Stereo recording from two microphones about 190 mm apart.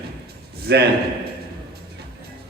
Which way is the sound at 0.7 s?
60° right (ahead or behind).